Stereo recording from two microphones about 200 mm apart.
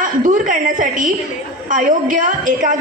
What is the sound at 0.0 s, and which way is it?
A woman's voice, 40° right (ahead or behind).